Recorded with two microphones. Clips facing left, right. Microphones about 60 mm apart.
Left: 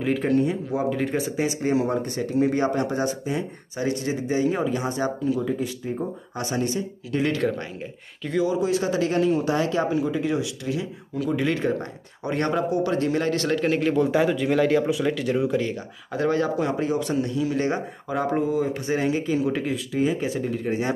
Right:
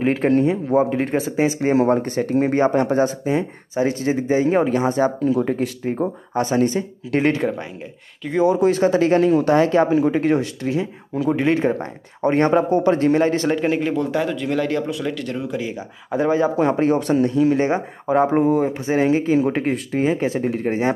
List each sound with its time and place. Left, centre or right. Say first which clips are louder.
0.0 s speech: right 5 dB; right
4.6 s speech: right 7 dB; right
4.8 s speech: right 7 dB; right
5.4 s speech: right 5 dB; right
8.4 s speech: right 6 dB; right
11.2 s speech: right 5 dB; right
12.2 s a man's voice: right 8 dB; right; by 13.9 s centre
13.9 s speech: left 1 dB; centre
15.5 s speech: left 1 dB; centre
16.5 s speech: right 6 dB; right
16.8 s a man's voice: right 7 dB; right
18.4 s speech: right 6 dB; right
18.7 s speech: right 6 dB; right
19.4 s speech: right 4 dB; right